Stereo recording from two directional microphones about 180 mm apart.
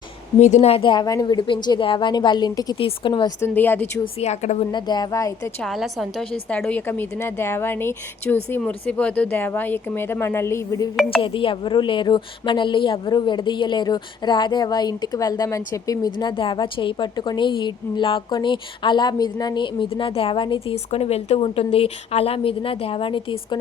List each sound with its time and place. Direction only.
0.3 s a woman's voice: 40° left (ahead or behind)
3.4 s speech: 10° left (ahead or behind)
4.2 s a woman's voice: 35° left (ahead or behind)
4.7 s a woman's voice: 25° left (ahead or behind)
5.6 s a woman's voice: centre (ahead or behind)
6.6 s speech: 10° left (ahead or behind)
11.2 s a woman's voice: 30° left (ahead or behind)